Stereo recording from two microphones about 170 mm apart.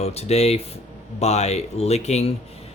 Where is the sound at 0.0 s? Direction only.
40° left (ahead or behind).